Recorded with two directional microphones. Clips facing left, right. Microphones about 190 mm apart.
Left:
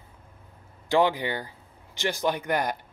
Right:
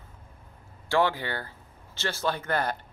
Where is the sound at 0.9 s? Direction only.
15° left (ahead or behind).